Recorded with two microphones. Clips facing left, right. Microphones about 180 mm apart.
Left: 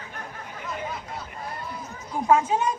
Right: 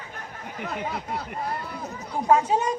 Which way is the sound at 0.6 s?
65° right (ahead or behind).